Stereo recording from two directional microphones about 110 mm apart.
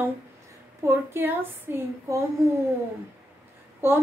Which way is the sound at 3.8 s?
20° right (ahead or behind).